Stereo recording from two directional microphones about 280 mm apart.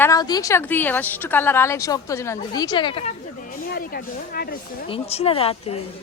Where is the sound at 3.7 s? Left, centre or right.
Left.